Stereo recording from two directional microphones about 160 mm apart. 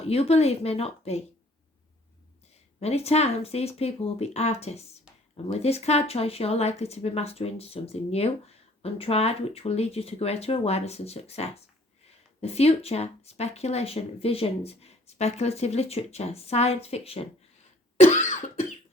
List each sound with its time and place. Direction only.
0.1 s speech: 40° left (ahead or behind)
2.8 s speech: 40° left (ahead or behind)
17.9 s cough: 45° left (ahead or behind)